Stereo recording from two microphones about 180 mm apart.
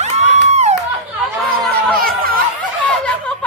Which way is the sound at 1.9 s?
55° right (ahead or behind).